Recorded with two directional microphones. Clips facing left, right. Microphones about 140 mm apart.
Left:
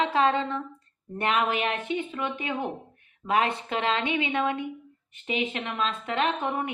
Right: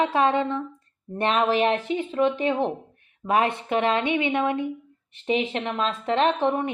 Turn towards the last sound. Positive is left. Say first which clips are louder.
# right 5 dB
turn(degrees=-30)  # may be behind; listen again after turning